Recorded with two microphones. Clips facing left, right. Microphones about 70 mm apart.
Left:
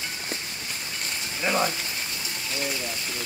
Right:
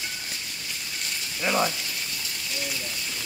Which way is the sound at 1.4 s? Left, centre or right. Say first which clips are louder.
Even; centre.